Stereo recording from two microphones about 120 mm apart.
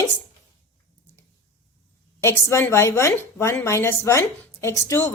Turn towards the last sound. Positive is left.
turn(degrees=25)  # may be behind; listen again after turning